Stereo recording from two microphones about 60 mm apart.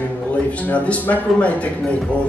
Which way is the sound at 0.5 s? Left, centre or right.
Left.